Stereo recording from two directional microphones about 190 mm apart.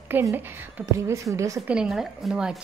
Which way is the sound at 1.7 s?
Centre (ahead or behind).